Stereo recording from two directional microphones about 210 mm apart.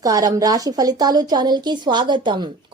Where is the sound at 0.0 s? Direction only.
15° right (ahead or behind).